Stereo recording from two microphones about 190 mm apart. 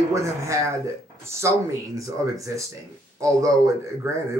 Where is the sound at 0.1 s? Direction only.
15° right (ahead or behind).